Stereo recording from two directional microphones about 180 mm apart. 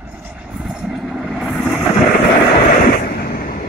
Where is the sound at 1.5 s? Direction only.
10° left (ahead or behind).